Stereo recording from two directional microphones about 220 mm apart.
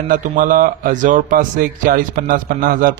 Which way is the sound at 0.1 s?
40° right (ahead or behind).